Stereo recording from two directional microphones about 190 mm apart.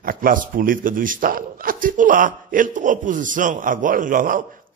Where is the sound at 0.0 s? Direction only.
50° right (ahead or behind).